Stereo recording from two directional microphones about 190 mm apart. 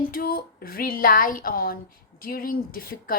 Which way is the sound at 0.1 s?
50° left (ahead or behind).